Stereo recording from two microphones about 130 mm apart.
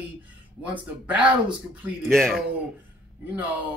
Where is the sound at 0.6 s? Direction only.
10° right (ahead or behind).